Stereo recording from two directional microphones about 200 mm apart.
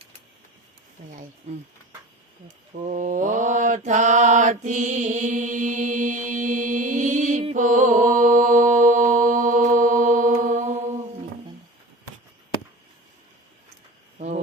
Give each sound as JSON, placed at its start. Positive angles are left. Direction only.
{"t": 2.7, "sound": "mantra", "side_deg": -40}